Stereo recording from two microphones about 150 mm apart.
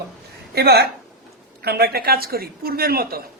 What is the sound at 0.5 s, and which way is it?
A man's voice, 90° right.